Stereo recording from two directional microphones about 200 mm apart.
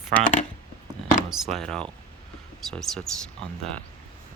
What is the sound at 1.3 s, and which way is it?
Speech, centre (ahead or behind).